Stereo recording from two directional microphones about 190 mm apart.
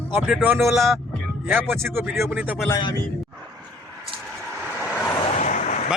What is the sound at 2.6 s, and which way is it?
Speech, 20° left (ahead or behind).